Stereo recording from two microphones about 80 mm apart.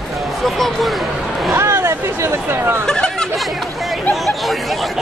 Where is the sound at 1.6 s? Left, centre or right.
Right.